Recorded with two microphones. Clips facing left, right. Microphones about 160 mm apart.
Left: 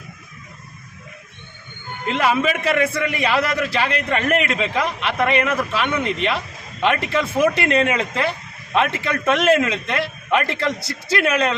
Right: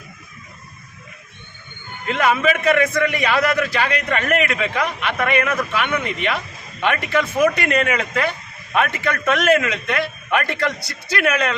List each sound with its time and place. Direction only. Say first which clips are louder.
2.1 s a man's voice: right 1 dB; 30° left (ahead or behind)